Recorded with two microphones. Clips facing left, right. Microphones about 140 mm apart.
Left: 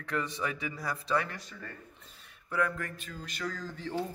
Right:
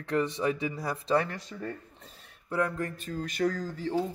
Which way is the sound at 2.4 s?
25° right (ahead or behind).